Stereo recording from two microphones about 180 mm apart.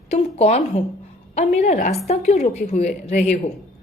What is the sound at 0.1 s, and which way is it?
A woman's voice, 35° left (ahead or behind).